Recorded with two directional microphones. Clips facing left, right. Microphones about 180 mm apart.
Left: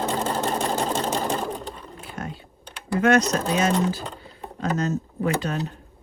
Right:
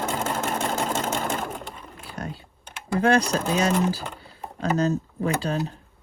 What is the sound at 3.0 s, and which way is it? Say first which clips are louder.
A woman's voice: left 2 dB; 30° right (ahead or behind).